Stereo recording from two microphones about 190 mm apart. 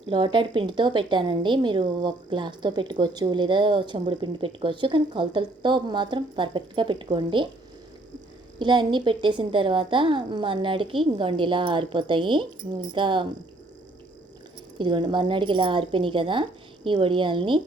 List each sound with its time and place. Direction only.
0.1 s a woman's voice: 25° right (ahead or behind)
8.5 s a woman's voice: 25° right (ahead or behind)
14.8 s a woman's voice: 25° right (ahead or behind)